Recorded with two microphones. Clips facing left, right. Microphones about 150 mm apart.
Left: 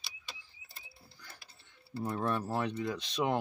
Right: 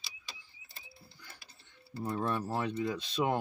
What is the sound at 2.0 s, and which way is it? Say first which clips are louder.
Speech: even; centre (ahead or behind).